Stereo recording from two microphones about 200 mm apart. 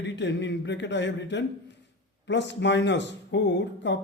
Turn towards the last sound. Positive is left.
turn(degrees=60)  # may be behind; listen again after turning